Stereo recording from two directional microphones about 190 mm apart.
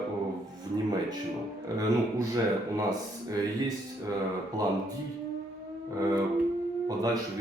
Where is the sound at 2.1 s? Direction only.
15° right (ahead or behind).